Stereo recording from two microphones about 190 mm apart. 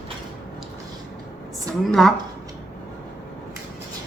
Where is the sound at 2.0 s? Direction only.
Centre (ahead or behind).